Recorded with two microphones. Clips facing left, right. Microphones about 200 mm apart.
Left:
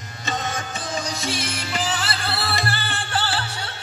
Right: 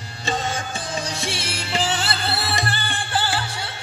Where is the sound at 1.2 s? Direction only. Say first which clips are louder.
Left 1 dB; 30° right (ahead or behind).